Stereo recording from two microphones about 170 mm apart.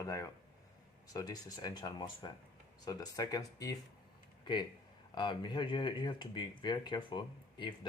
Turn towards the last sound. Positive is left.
turn(degrees=25)  # may be behind; listen again after turning